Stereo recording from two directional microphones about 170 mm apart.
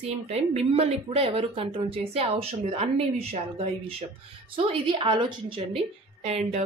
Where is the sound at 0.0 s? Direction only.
40° right (ahead or behind).